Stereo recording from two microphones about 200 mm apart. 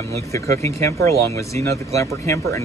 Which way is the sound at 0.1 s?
15° left (ahead or behind).